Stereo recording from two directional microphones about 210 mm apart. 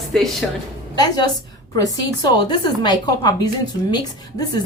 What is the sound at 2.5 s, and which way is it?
A woman's voice, 20° left (ahead or behind).